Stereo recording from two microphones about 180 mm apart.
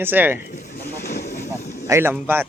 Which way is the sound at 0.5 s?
50° left (ahead or behind).